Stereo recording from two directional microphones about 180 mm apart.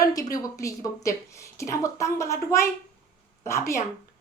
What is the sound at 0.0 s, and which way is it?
A woman's voice, 20° left (ahead or behind).